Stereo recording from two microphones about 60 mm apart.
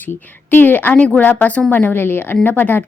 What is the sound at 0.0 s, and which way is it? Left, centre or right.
Speech, left.